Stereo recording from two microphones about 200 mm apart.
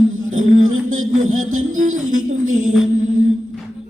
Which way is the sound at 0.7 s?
90° right.